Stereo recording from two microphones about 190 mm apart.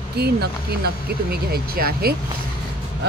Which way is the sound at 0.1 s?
60° right (ahead or behind).